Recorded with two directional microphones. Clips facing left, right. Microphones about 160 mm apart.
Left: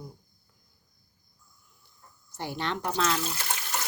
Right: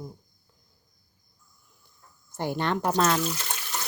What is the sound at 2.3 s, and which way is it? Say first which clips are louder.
Speech: right 5 dB; 50° right (ahead or behind).